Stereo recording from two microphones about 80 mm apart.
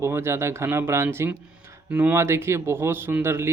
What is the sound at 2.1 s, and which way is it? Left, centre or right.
Speech, right.